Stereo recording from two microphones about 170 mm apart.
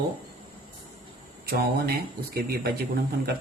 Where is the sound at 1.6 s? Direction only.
65° right (ahead or behind).